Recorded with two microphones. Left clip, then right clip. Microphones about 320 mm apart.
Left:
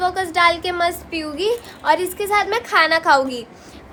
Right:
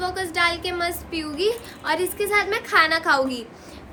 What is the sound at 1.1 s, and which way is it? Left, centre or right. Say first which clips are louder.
A child's voice: left 3 dB; centre.